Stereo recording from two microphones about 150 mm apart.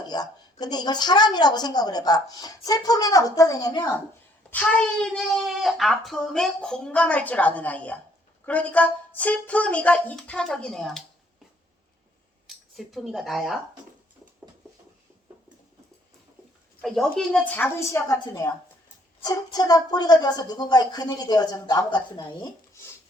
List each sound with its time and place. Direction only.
0.1 s a woman's voice: 25° left (ahead or behind)
4.5 s speech: 5° left (ahead or behind)
12.5 s speech: centre (ahead or behind)
16.8 s a woman's voice: centre (ahead or behind); by 22.4 s 30° left (ahead or behind)